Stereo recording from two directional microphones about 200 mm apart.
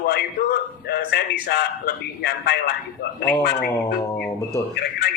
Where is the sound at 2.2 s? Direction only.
55° left (ahead or behind).